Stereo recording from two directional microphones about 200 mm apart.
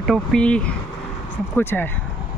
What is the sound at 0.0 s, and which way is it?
Speech, centre (ahead or behind).